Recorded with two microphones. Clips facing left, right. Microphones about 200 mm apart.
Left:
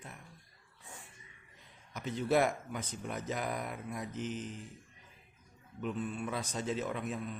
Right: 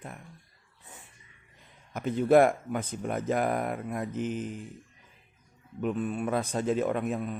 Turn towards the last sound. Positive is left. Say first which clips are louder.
# right 8 dB
turn(degrees=-55)  # may be behind; listen again after turning